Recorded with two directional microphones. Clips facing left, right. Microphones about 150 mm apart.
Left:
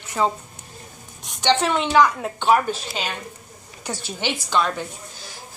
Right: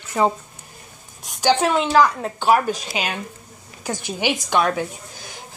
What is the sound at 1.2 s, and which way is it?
A woman's voice, 5° right (ahead or behind).